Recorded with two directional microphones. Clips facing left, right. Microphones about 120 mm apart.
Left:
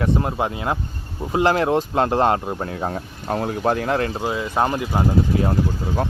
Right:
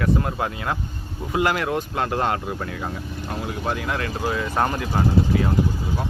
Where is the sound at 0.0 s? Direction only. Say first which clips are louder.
Left 2 dB; 25° left (ahead or behind).